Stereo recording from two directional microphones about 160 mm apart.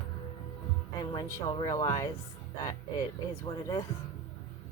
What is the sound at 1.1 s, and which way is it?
Speech, 25° left (ahead or behind).